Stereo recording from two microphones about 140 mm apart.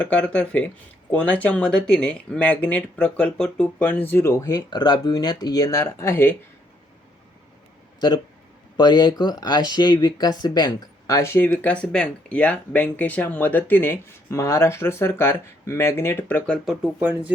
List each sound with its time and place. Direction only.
0.0 s speech: 10° left (ahead or behind)
8.8 s speech: 30° left (ahead or behind); by 16.6 s 15° left (ahead or behind)
16.6 s speech: 10° right (ahead or behind)